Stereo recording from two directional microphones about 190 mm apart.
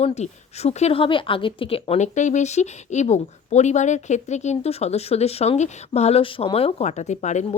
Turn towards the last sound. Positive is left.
turn(degrees=40)  # may be behind; listen again after turning